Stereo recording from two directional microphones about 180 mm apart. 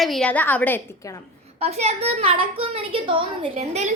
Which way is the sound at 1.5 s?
35° right (ahead or behind).